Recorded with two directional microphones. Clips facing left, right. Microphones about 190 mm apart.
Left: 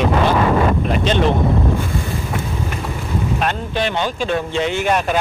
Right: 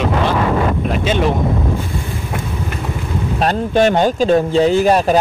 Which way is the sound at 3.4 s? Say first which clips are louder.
Right 7 dB; 40° right (ahead or behind).